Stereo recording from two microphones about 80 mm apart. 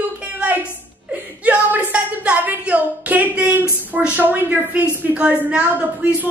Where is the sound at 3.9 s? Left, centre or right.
Right.